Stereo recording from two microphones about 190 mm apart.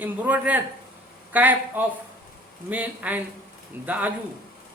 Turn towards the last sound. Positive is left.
turn(degrees=-10)  # may be behind; listen again after turning